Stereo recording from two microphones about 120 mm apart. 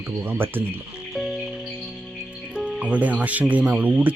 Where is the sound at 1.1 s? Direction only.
Centre (ahead or behind).